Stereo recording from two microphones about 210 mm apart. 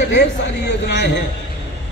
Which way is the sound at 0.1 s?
55° left (ahead or behind).